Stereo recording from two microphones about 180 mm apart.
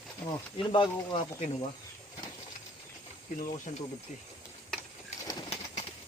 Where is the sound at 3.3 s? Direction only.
45° left (ahead or behind).